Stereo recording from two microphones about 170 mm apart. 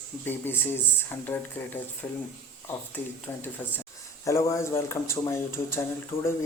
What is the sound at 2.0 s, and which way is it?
Speech, 10° left (ahead or behind).